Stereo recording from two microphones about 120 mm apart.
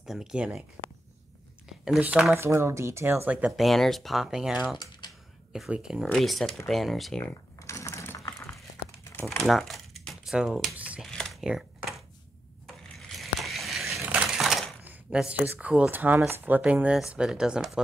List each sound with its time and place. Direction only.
0.0 s speech: 5° right (ahead or behind)
1.7 s speech: 5° right (ahead or behind)
2.3 s speech: 20° right (ahead or behind)
3.5 s speech: centre (ahead or behind)
7.5 s typing: 25° left (ahead or behind)
8.3 s a sound: 25° left (ahead or behind)
9.1 s crumpling: 20° left (ahead or behind)
9.4 s typing: centre (ahead or behind)
11.0 s a sound: 5° left (ahead or behind)
14.0 s crushing: 10° right (ahead or behind)
14.9 s speech: 10° right (ahead or behind)